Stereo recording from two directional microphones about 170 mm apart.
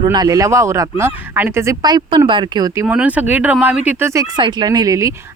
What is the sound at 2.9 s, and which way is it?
Speech, 10° right (ahead or behind).